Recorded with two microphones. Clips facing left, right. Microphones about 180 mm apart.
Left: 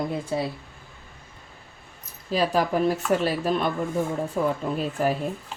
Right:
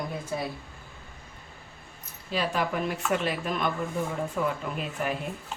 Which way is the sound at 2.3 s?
40° left (ahead or behind).